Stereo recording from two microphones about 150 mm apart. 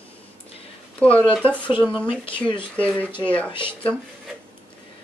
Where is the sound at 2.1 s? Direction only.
15° right (ahead or behind).